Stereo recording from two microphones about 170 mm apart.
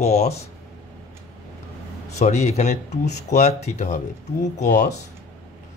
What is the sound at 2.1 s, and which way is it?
Speech, 40° left (ahead or behind).